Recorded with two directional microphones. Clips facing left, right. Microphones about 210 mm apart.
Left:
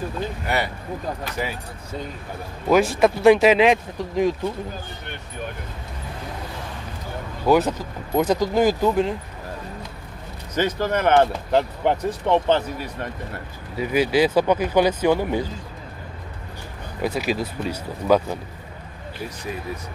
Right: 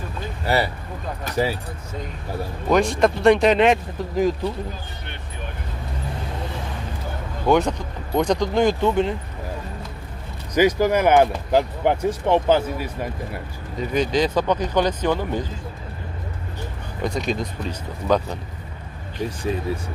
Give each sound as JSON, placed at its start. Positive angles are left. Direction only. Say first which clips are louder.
{"t": 0.5, "sound": "speech", "louder": "right 5 dB", "side_deg": -35}
{"t": 2.7, "sound": "speech", "louder": "left 1 dB", "side_deg": 5}
{"t": 7.4, "sound": "speech", "louder": "even", "side_deg": 5}
{"t": 10.5, "sound": "speech", "louder": "right 5 dB", "side_deg": -10}
{"t": 13.7, "sound": "speech", "louder": "left 2 dB", "side_deg": 10}
{"t": 17.0, "sound": "speech", "louder": "left 1 dB", "side_deg": 5}
{"t": 19.2, "sound": "speech", "louder": "right 6 dB", "side_deg": -30}